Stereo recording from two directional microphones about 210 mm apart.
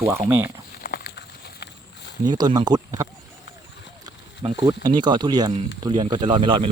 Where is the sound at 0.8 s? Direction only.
45° left (ahead or behind).